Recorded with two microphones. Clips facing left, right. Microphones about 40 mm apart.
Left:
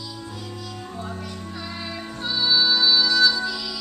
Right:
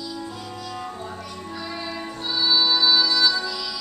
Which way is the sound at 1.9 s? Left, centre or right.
Centre.